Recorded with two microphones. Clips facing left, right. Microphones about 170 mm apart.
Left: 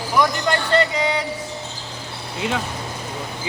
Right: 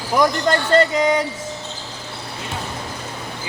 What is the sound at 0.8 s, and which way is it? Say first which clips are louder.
Music: right 4 dB; 45° right (ahead or behind).